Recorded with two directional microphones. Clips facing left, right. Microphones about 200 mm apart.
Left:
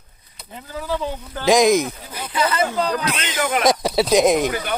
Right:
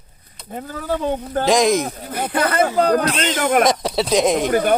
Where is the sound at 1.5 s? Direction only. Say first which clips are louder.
Left 2 dB; 5° left (ahead or behind).